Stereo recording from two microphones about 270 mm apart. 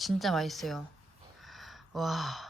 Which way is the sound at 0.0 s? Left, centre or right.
Centre.